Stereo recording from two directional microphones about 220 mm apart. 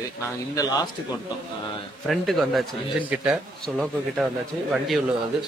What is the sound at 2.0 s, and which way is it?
A man's voice, centre (ahead or behind).